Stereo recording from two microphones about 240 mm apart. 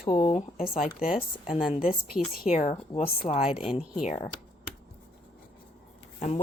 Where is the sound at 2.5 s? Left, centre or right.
Left.